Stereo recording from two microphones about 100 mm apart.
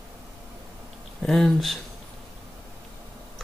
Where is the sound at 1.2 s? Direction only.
Centre (ahead or behind).